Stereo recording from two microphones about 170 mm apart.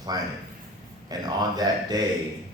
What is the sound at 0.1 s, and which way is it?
A man's voice, 20° right (ahead or behind).